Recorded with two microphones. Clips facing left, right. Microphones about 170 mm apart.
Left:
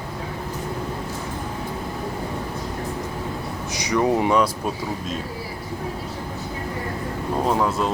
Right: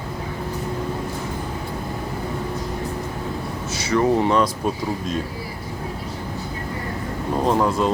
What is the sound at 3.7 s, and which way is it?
Speech, 15° left (ahead or behind).